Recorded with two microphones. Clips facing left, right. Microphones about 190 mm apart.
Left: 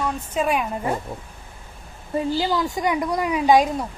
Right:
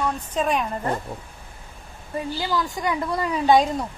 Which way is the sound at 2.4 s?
20° left (ahead or behind).